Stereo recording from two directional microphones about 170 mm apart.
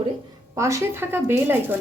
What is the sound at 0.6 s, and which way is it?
A woman's voice, 15° right (ahead or behind).